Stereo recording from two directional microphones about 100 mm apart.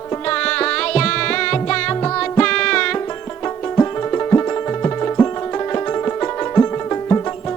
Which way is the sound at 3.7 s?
25° left (ahead or behind).